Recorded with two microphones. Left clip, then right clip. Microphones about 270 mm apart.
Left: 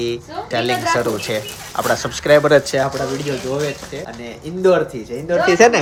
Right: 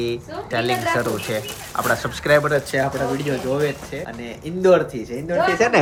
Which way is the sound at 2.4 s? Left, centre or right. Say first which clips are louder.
Left 7 dB; left.